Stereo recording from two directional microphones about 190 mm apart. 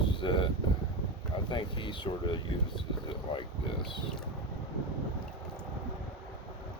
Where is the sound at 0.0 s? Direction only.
25° left (ahead or behind).